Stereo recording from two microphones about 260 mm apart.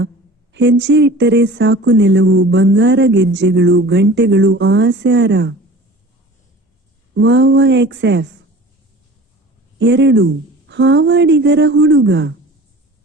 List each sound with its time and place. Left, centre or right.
0.5 s speech: right
7.1 s speech: right
9.7 s speech: right